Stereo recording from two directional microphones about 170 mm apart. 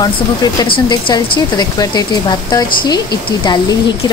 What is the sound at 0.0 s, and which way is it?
Speech, 25° left (ahead or behind).